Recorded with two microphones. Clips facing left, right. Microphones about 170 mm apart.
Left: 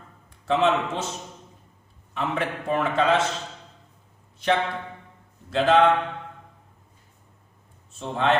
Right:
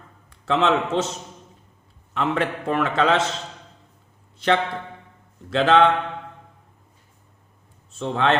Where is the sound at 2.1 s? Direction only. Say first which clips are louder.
Right 4 dB; 90° right.